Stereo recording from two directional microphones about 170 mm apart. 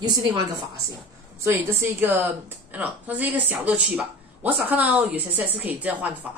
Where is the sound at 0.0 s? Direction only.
25° right (ahead or behind).